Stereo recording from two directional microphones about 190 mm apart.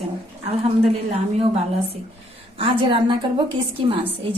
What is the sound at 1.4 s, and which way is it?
A woman's voice, 30° right (ahead or behind).